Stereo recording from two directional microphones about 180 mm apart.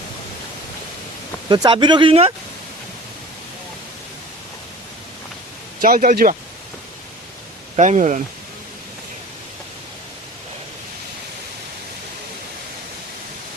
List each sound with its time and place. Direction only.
1.5 s speech: 25° right (ahead or behind)
5.8 s speech: 50° right (ahead or behind)
7.8 s speech: 40° right (ahead or behind)